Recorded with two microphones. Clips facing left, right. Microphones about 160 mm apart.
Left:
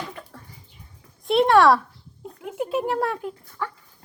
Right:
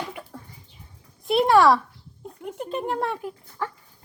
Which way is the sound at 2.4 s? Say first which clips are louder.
Left 4 dB; 5° left (ahead or behind).